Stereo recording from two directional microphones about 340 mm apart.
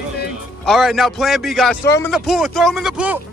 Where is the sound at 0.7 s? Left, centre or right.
Centre.